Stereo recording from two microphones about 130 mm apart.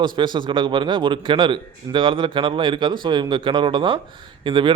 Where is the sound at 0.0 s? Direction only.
40° right (ahead or behind).